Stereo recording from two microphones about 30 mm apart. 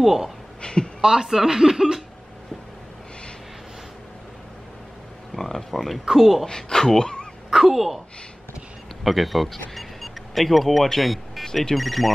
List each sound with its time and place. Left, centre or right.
0.0 s speech: centre
0.6 s speech: left
1.0 s speech: right
5.3 s a sound: centre
5.7 s speech: centre
6.0 s speech: centre
6.4 s a man's voice: left
7.5 s speech: centre
9.0 s speech: centre
9.8 s a sound: centre
11.7 s speech: centre